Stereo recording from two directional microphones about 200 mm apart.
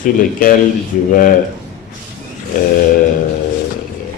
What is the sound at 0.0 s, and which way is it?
Speech, 45° left (ahead or behind).